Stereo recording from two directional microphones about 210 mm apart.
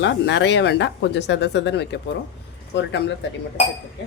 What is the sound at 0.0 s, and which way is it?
Speech, 55° left (ahead or behind).